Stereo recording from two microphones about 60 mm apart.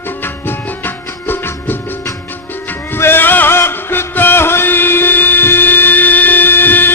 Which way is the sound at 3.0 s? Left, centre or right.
Left.